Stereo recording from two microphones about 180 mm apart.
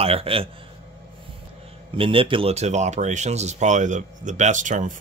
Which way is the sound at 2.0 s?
30° right (ahead or behind).